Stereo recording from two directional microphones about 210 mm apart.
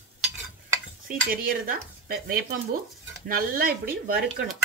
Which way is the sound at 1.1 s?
45° right (ahead or behind).